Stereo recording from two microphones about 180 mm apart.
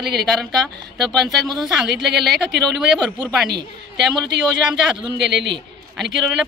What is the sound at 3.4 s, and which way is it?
A woman's voice, 65° right (ahead or behind).